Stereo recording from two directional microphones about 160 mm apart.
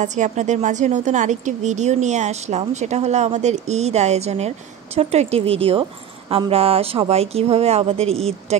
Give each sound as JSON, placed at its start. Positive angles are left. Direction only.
{"t": 0.0, "sound": "a woman's voice", "side_deg": -50}